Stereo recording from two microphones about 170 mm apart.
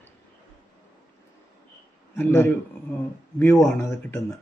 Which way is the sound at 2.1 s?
10° left (ahead or behind).